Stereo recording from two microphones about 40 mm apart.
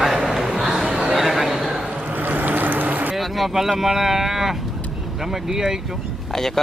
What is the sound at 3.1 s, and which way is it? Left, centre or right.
Speech, centre.